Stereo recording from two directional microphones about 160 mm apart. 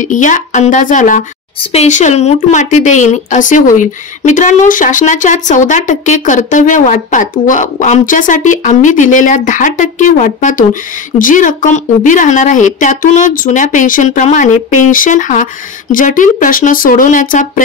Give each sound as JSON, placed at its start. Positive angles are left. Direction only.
{"t": 0.0, "sound": "a woman's voice", "side_deg": 50}
{"t": 1.6, "sound": "a woman's voice", "side_deg": 40}